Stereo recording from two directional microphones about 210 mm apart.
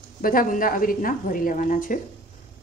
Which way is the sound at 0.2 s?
40° left (ahead or behind).